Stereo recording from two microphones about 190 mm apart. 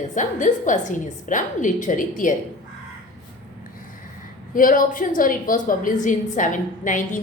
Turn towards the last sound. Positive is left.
turn(degrees=40)  # may be behind; listen again after turning